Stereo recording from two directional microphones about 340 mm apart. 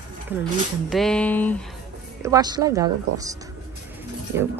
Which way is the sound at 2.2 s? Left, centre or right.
Centre.